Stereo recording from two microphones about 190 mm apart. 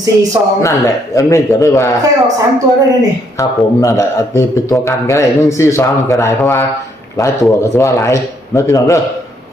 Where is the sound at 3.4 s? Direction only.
15° left (ahead or behind).